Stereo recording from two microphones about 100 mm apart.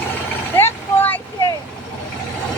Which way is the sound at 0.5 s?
20° left (ahead or behind).